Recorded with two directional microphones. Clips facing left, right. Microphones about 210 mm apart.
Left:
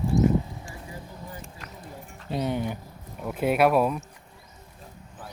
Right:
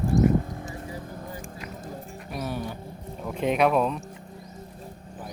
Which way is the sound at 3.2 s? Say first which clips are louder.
Left 1 dB; 5° left (ahead or behind).